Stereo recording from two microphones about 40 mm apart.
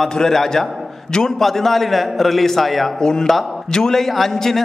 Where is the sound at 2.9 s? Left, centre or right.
Centre.